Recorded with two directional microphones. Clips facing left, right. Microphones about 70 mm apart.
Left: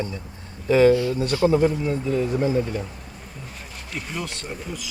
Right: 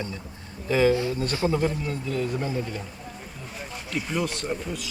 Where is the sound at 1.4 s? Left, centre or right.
Centre.